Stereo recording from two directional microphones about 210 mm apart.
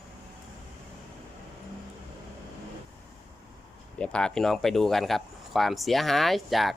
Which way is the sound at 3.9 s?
5° left (ahead or behind).